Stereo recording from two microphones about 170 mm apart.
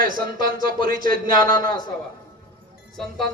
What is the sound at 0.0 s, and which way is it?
A man's voice, 55° right (ahead or behind).